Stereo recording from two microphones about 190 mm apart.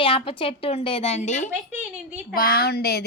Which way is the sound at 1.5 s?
10° right (ahead or behind).